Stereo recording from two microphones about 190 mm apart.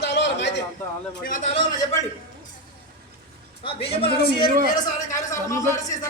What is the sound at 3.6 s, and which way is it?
Speech, 30° left (ahead or behind).